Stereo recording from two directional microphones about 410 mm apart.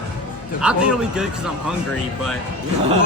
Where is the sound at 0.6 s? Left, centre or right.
Centre.